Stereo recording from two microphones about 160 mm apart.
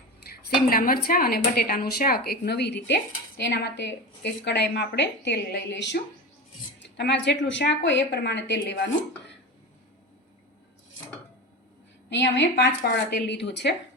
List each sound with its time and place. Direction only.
0.7 s speech: 65° left (ahead or behind); by 8.8 s 90° left
12.1 s speech: 90° left